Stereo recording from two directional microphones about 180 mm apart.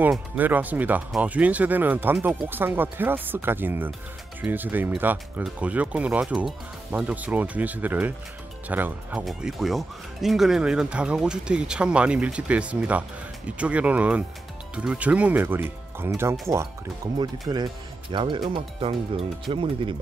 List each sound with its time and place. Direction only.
0.0 s speech: 10° right (ahead or behind); by 20.0 s 30° right (ahead or behind)